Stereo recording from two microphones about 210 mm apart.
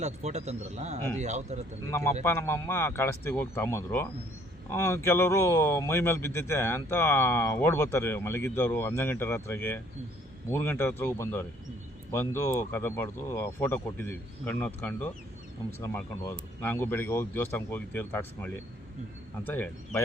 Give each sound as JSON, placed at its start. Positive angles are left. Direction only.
{"t": 0.0, "sound": "speech", "side_deg": -30}
{"t": 1.9, "sound": "speech", "side_deg": 15}